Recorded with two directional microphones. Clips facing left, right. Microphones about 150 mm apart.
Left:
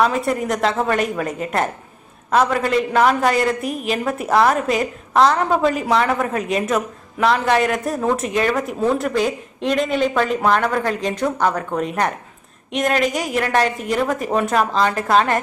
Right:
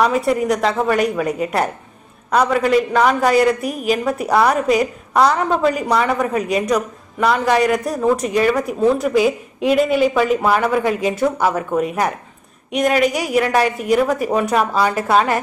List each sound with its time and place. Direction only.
0.0 s a woman's voice: centre (ahead or behind)